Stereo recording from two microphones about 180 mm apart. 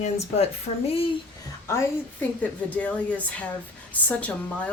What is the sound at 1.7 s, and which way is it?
Speech, 15° left (ahead or behind).